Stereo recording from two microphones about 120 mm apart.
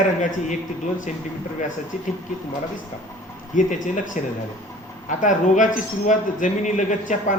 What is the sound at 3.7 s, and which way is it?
Speech, 90° left.